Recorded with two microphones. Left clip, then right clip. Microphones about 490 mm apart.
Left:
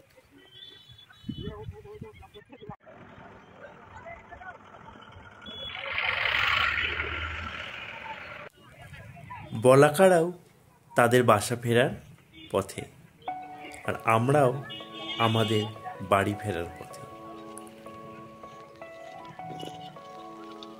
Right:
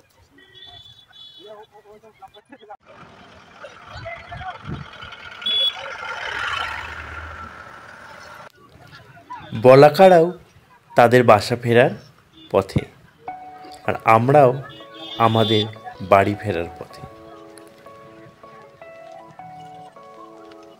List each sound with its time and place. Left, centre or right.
3.8 s vehicle: centre
9.6 s speech: left